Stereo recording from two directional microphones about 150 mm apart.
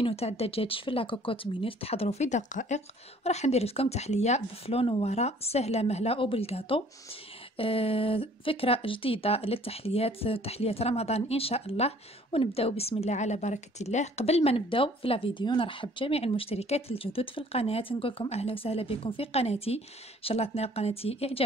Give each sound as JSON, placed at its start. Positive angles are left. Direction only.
{"t": 0.0, "sound": "speech", "side_deg": 45}